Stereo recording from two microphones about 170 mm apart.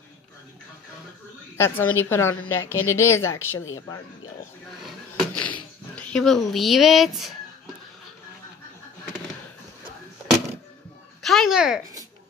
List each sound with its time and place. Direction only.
1.6 s a woman's voice: 10° left (ahead or behind)
4.8 s a sound: 5° left (ahead or behind)
11.2 s speech: centre (ahead or behind)